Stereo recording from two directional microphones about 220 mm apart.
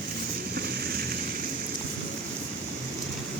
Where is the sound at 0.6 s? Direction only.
45° right (ahead or behind).